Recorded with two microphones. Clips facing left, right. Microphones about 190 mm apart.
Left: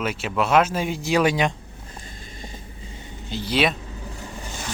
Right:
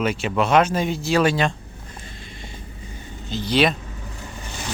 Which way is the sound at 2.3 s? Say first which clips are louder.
Left 3 dB; 40° left (ahead or behind).